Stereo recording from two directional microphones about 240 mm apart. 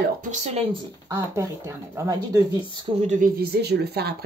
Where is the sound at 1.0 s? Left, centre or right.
Centre.